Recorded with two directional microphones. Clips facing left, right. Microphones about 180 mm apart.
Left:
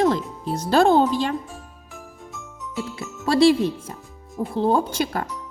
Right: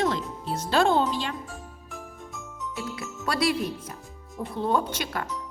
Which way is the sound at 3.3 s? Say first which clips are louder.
Left 10 dB; 30° left (ahead or behind).